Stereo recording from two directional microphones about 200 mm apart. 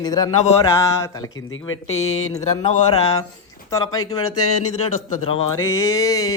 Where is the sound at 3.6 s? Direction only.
15° left (ahead or behind).